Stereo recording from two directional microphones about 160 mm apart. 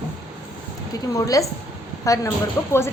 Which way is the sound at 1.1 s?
20° left (ahead or behind).